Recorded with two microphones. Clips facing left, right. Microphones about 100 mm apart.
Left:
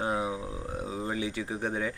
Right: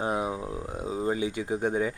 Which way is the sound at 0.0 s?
20° right (ahead or behind).